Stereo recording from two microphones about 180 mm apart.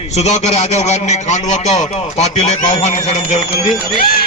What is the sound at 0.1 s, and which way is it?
A man's voice, 40° left (ahead or behind).